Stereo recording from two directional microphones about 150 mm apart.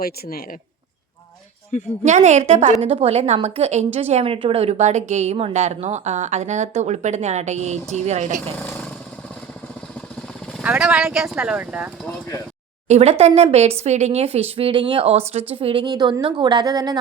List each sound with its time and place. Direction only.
0.0 s speech: 90° left
1.7 s a woman's voice: 50° left (ahead or behind)
2.0 s speech: 50° right (ahead or behind)
8.5 s speech: 10° left (ahead or behind)
10.6 s speech: 5° right (ahead or behind)
12.9 s a woman's voice: 45° right (ahead or behind); by 17.0 s 25° right (ahead or behind)